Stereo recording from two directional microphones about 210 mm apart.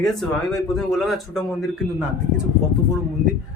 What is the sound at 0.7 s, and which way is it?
Speech, centre (ahead or behind).